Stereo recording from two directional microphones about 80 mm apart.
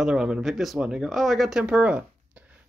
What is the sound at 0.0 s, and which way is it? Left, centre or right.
Speech, centre.